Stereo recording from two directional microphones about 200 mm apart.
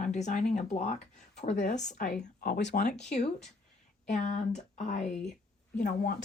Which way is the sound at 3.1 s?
35° left (ahead or behind).